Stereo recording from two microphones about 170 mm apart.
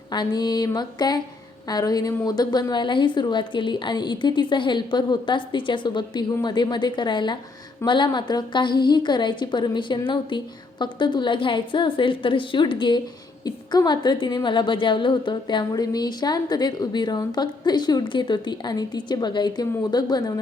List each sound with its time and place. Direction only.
0.1 s a woman's voice: 25° left (ahead or behind)